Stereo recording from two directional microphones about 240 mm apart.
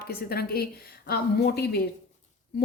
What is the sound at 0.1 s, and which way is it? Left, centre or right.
A woman's voice, left.